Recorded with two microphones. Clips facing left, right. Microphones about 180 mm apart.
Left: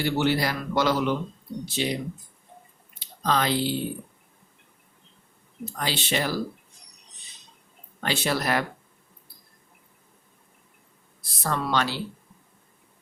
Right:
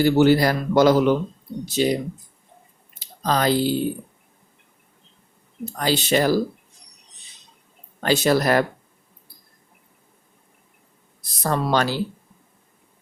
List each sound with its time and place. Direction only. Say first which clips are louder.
0.0 s speech: right 8 dB; 45° right (ahead or behind)
3.2 s speech: right 5 dB; 40° right (ahead or behind)
5.8 s speech: right 8 dB; 40° right (ahead or behind)
8.0 s speech: right 8 dB; 40° right (ahead or behind)
11.2 s speech: right 5 dB; 40° right (ahead or behind)